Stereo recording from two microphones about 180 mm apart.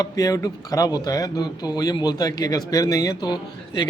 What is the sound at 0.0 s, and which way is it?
Speech, 20° left (ahead or behind).